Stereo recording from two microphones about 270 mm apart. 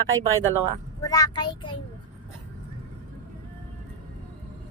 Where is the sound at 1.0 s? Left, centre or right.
Centre.